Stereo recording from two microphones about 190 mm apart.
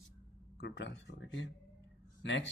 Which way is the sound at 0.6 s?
70° left (ahead or behind).